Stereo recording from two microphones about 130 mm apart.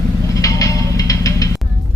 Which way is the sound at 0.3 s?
25° left (ahead or behind).